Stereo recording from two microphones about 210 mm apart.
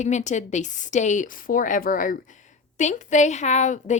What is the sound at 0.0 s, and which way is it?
A woman's voice, 35° left (ahead or behind).